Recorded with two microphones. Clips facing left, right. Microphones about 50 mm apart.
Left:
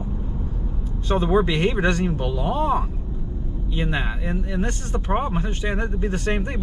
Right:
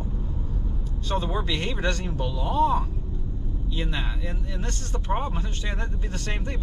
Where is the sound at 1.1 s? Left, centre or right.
Left.